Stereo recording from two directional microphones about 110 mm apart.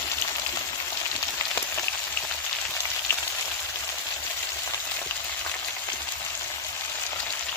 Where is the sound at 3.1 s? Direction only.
20° left (ahead or behind).